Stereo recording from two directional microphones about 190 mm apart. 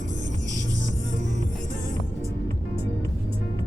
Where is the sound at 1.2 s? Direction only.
40° right (ahead or behind).